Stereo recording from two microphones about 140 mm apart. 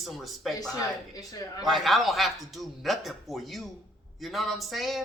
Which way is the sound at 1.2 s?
25° left (ahead or behind).